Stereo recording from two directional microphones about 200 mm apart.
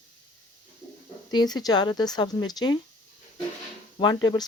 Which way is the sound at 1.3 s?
20° left (ahead or behind).